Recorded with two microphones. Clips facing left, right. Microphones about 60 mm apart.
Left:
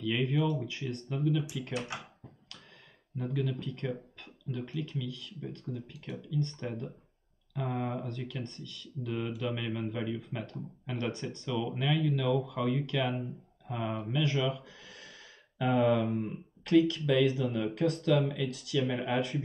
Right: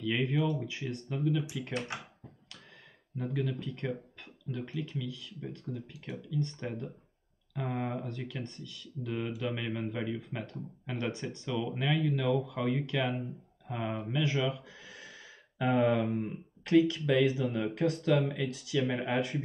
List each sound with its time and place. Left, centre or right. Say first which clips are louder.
0.0 s speech: even; centre
3.2 s speech: even; right